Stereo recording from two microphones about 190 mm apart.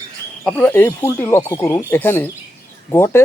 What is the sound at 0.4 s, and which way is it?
Speech, 10° left (ahead or behind).